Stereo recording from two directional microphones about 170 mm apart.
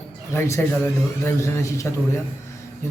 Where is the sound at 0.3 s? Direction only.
15° left (ahead or behind).